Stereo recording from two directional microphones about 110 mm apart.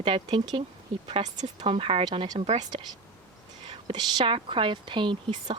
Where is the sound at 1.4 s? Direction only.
70° right (ahead or behind).